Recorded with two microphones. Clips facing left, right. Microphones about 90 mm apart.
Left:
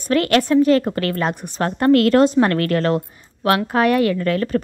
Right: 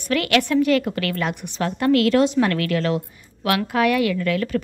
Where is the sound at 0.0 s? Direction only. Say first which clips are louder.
Left 3 dB; 35° left (ahead or behind).